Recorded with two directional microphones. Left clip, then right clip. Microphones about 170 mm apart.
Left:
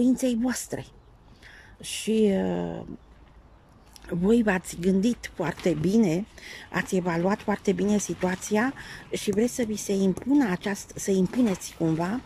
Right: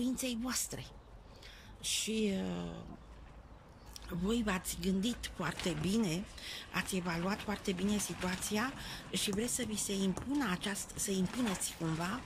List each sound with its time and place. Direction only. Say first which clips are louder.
0.0 s speech: left 13 dB; 40° left (ahead or behind)
3.9 s speech: left 14 dB; 45° left (ahead or behind)